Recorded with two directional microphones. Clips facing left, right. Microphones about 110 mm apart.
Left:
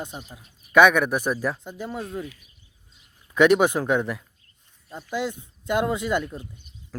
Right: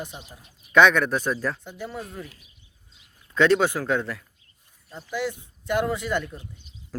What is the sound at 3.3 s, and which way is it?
Speech, 15° left (ahead or behind).